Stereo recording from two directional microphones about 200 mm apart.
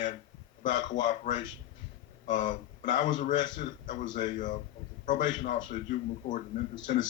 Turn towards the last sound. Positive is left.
turn(degrees=40)  # may be behind; listen again after turning